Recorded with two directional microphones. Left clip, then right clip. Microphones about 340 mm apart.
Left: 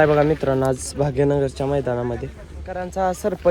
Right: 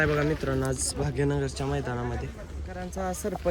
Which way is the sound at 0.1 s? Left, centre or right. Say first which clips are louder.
Left 10 dB; centre.